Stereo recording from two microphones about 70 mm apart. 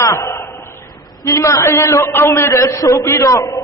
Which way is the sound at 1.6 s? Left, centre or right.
Left.